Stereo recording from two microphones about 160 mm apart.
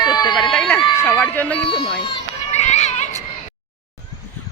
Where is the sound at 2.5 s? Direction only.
45° left (ahead or behind).